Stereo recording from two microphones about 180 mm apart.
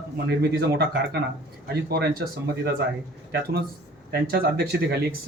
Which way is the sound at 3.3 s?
65° right (ahead or behind).